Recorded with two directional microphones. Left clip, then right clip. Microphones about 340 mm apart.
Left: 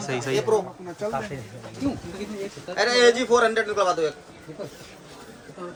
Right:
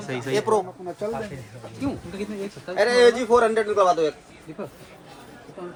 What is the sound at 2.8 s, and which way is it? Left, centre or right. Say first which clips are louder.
A man's voice: right 1 dB; right.